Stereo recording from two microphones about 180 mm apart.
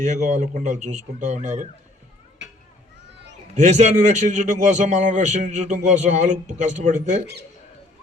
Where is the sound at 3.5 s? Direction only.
40° right (ahead or behind).